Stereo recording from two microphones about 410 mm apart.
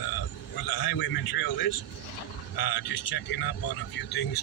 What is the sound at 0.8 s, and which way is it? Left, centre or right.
Speech, left.